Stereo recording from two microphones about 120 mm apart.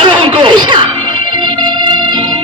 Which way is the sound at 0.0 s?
45° right (ahead or behind).